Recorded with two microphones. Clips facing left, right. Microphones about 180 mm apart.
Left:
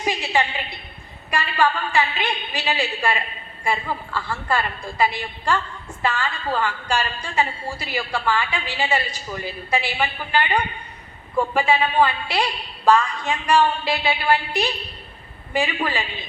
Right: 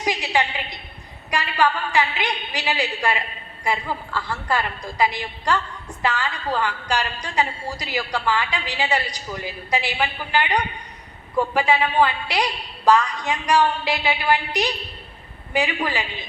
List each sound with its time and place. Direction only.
0.0 s a woman's voice: 15° right (ahead or behind)